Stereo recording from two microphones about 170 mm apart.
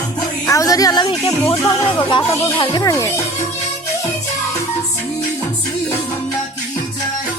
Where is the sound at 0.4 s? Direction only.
20° left (ahead or behind).